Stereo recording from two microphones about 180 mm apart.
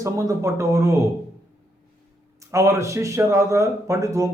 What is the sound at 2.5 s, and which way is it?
A man's voice, 15° right (ahead or behind).